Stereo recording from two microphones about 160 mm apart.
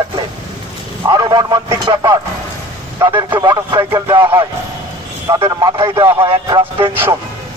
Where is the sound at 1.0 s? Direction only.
25° right (ahead or behind).